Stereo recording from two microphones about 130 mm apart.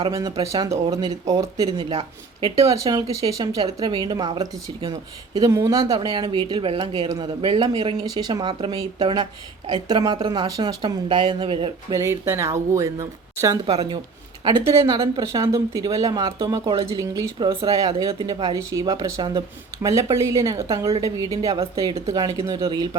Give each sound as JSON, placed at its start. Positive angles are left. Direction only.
{"t": 0.1, "sound": "speech", "side_deg": -25}
{"t": 2.7, "sound": "speech", "side_deg": -30}
{"t": 5.9, "sound": "speech", "side_deg": -35}
{"t": 11.9, "sound": "speech", "side_deg": -25}
{"t": 13.7, "sound": "speech", "side_deg": -40}